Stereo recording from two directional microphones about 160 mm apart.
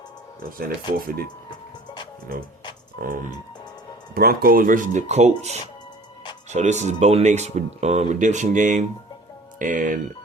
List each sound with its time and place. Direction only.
0.7 s speech: 70° right (ahead or behind)
3.0 s speech: 55° right (ahead or behind)